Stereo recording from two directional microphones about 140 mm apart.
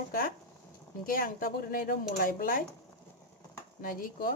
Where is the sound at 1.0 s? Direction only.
90° left.